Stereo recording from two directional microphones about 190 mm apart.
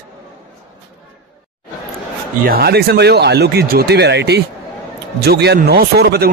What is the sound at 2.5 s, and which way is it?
Speech, 55° right (ahead or behind).